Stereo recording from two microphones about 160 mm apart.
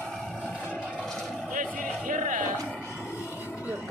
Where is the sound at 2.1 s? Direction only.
55° right (ahead or behind).